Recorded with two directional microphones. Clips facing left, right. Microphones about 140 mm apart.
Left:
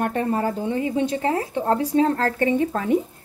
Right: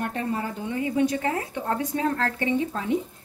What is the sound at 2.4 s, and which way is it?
Speech, 50° left (ahead or behind).